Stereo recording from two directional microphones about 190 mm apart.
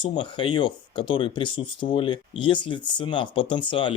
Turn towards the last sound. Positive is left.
turn(degrees=25)  # may be behind; listen again after turning